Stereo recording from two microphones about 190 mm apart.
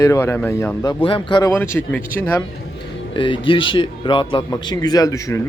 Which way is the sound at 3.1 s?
25° left (ahead or behind).